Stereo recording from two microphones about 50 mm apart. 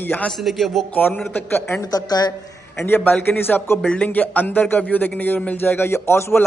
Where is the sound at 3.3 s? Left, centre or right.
Left.